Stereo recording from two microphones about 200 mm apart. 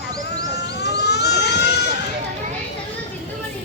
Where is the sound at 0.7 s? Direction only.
55° left (ahead or behind).